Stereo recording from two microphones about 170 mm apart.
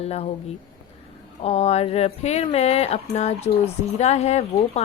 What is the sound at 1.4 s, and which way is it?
Speech, 40° left (ahead or behind).